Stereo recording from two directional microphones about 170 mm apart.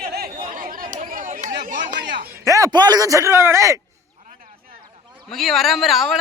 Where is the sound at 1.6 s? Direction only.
50° right (ahead or behind).